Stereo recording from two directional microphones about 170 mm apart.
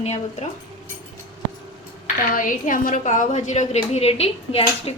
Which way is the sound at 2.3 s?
55° left (ahead or behind).